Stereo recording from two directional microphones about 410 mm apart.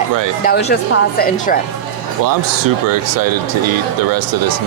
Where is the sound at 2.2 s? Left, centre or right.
Right.